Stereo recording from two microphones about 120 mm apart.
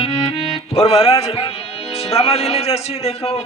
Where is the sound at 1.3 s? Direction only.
50° left (ahead or behind).